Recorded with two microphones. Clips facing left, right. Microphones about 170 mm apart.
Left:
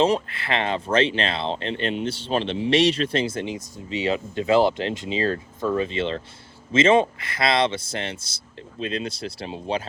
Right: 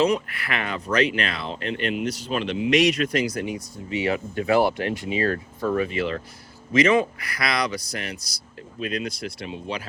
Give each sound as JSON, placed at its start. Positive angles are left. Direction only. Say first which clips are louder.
{"t": 0.0, "sound": "speech", "louder": "left 1 dB", "side_deg": 25}